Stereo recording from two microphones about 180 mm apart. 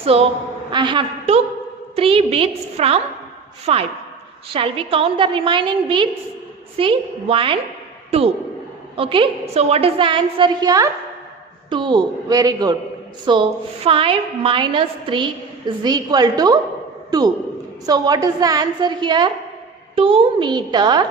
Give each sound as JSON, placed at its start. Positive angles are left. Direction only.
{"t": 0.0, "sound": "a woman's voice", "side_deg": -35}
{"t": 9.0, "sound": "a woman's voice", "side_deg": -30}